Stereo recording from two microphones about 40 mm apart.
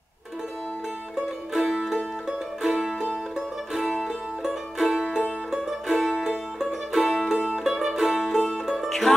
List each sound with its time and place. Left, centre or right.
1.5 s music: centre
3.7 s music: centre
7.3 s music: right
7.6 s music: centre
8.7 s music: centre